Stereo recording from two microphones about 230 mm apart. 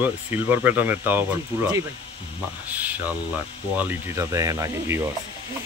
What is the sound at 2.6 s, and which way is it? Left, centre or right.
Speech, centre.